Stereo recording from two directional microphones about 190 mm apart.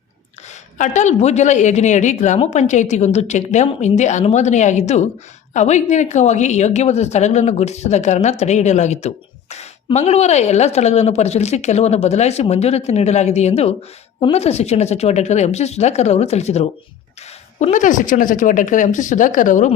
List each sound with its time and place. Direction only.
0.8 s a woman's voice: 40° left (ahead or behind)